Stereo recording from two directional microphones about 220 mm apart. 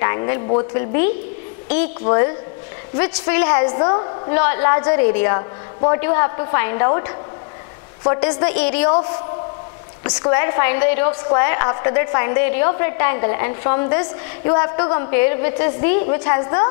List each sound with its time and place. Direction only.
0.0 s a sound: 20° left (ahead or behind)
0.7 s a woman's voice: 15° left (ahead or behind)
3.0 s a woman's voice: 10° left (ahead or behind)
3.6 s a woman's voice: 25° left (ahead or behind)
10.0 s a woman's voice: 20° left (ahead or behind)